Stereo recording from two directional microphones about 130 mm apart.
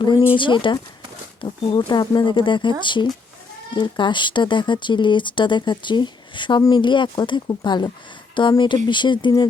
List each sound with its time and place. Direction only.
0.0 s speech: 35° left (ahead or behind)